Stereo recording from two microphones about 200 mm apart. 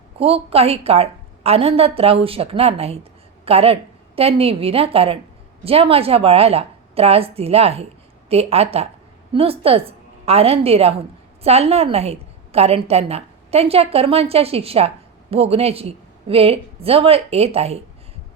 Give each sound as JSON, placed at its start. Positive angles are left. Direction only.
{"t": 0.2, "sound": "a woman's voice", "side_deg": -30}